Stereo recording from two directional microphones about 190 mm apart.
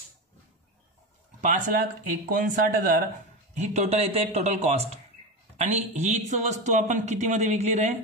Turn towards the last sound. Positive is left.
turn(degrees=-35)  # may be behind; listen again after turning